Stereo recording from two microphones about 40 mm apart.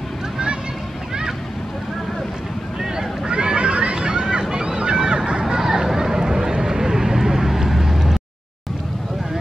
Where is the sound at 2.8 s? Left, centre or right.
Centre.